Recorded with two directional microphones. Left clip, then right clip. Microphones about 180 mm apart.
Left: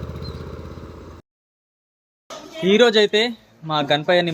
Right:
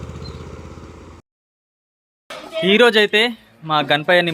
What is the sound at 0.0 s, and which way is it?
Vehicle, 20° right (ahead or behind).